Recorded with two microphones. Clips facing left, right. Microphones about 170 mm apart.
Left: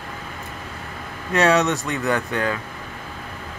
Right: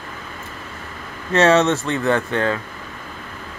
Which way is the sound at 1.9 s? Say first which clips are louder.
Right 3 dB; 15° left (ahead or behind).